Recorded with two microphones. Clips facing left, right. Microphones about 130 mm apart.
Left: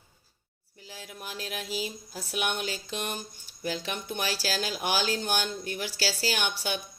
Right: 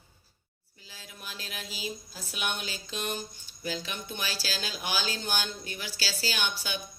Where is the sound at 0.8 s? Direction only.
60° left (ahead or behind).